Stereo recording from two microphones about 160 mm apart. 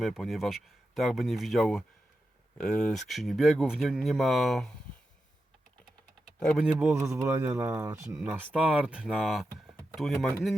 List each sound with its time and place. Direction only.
0.0 s speech: centre (ahead or behind)
6.4 s speech: centre (ahead or behind)
6.9 s speech: 15° right (ahead or behind); by 10.2 s centre (ahead or behind)